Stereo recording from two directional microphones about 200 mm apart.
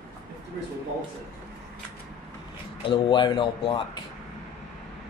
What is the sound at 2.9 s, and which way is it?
Speech, 25° left (ahead or behind).